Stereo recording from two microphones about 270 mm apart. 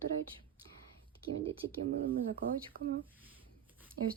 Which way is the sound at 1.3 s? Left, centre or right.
Right.